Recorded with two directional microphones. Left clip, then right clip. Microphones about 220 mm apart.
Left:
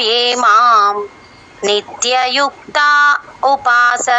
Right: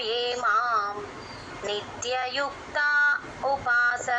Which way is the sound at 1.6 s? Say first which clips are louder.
Left 16 dB; 40° left (ahead or behind).